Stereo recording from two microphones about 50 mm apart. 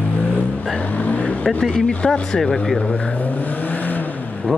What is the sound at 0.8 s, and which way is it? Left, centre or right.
Vehicle, left.